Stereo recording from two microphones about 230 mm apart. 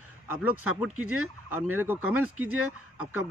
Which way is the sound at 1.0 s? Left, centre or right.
Right.